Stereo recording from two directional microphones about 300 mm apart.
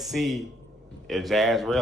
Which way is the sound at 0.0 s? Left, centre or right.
Centre.